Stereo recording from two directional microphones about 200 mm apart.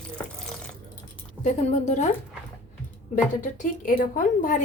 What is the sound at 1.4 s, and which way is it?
Speech, 40° left (ahead or behind).